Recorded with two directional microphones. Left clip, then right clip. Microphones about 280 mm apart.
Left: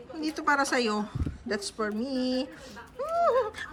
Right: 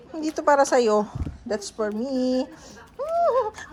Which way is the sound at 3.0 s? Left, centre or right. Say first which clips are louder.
Right 4 dB; centre.